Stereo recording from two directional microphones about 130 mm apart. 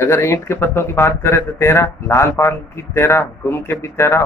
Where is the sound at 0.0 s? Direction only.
20° left (ahead or behind).